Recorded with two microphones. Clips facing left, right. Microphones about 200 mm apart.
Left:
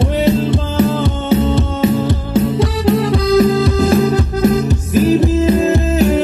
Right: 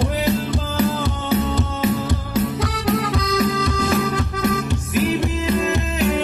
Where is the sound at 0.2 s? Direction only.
25° left (ahead or behind).